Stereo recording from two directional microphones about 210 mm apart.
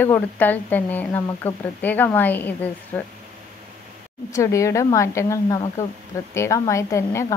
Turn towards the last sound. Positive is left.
turn(degrees=15)  # may be behind; listen again after turning